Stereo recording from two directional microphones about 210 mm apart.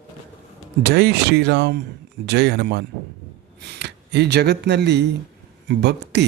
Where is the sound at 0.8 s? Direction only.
50° right (ahead or behind).